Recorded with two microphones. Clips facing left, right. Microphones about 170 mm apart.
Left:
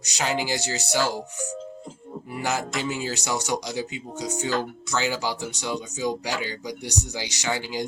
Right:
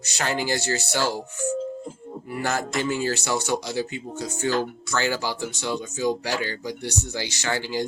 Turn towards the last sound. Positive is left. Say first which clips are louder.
# right 1 dB
turn(degrees=15)  # may be behind; listen again after turning